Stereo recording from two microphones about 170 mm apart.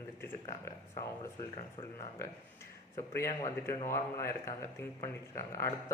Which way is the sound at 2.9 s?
15° left (ahead or behind).